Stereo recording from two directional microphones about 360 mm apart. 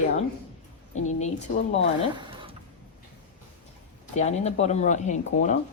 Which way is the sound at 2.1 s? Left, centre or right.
Centre.